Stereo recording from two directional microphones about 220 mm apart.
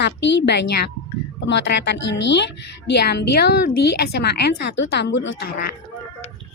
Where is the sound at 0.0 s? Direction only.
50° left (ahead or behind).